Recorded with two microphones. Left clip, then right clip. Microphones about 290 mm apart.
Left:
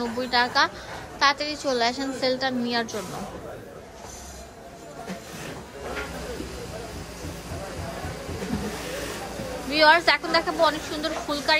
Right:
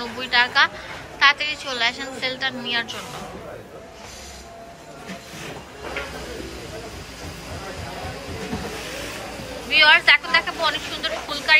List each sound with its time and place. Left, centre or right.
0.0 s a woman's voice: centre
9.7 s a woman's voice: centre